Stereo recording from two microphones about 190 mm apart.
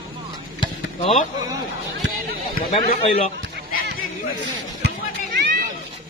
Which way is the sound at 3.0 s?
30° left (ahead or behind).